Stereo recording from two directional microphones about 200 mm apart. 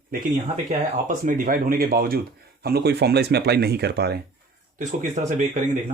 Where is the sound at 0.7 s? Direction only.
40° right (ahead or behind); by 4.2 s 55° right (ahead or behind).